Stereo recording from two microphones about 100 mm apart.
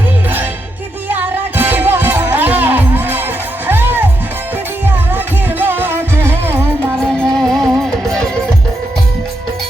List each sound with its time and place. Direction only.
1.0 s music: 20° right (ahead or behind)
5.1 s music: 20° right (ahead or behind)
7.1 s music: 5° left (ahead or behind)